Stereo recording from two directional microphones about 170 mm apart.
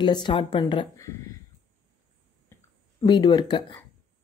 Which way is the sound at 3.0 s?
25° left (ahead or behind).